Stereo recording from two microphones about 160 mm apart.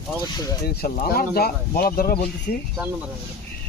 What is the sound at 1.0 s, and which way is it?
Speech, 70° left (ahead or behind).